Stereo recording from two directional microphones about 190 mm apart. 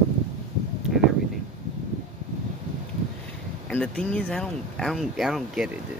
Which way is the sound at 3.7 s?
5° left (ahead or behind).